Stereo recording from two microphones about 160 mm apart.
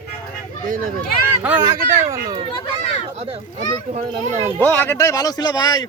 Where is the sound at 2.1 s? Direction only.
20° right (ahead or behind).